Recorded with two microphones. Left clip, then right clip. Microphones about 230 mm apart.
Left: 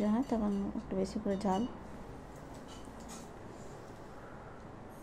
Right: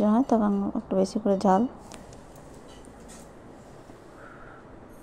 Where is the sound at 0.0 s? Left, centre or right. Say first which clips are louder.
Right 11 dB; right.